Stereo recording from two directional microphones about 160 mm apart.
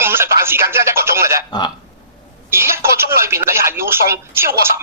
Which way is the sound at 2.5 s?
15° right (ahead or behind).